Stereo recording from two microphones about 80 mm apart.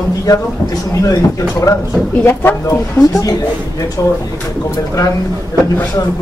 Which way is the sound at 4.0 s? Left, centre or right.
Left.